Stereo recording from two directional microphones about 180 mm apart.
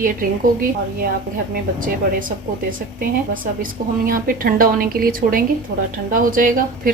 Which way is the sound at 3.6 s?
50° right (ahead or behind).